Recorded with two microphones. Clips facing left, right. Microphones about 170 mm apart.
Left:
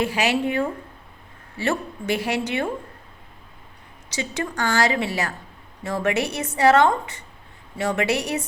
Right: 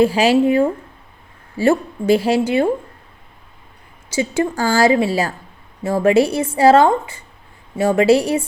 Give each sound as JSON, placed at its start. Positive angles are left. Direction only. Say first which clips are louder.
{"t": 0.0, "sound": "a woman's voice", "louder": "right 9 dB", "side_deg": -30}
{"t": 4.1, "sound": "a woman's voice", "louder": "right 9 dB", "side_deg": -25}